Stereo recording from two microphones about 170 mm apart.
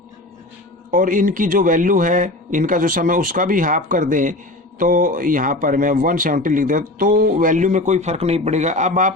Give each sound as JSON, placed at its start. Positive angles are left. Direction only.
{"t": 0.9, "sound": "a man's voice", "side_deg": -50}